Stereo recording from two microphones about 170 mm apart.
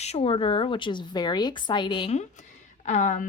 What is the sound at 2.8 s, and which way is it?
Speech, 45° left (ahead or behind).